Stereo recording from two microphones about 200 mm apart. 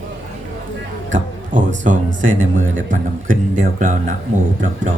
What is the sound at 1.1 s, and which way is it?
A man's voice, 40° right (ahead or behind).